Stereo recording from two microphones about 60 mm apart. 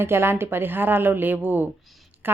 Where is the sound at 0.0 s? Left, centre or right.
Right.